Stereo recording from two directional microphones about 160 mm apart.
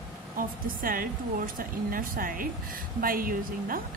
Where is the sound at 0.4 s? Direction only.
60° right (ahead or behind).